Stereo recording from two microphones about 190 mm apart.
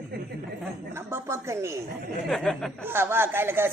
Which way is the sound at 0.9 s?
15° right (ahead or behind).